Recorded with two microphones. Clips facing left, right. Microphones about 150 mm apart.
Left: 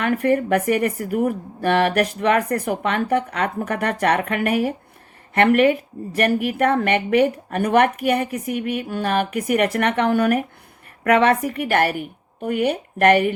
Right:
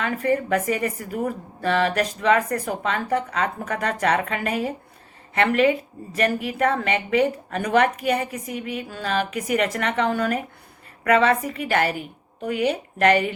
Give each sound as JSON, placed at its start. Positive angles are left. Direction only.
{"t": 0.0, "sound": "a woman's voice", "side_deg": 60}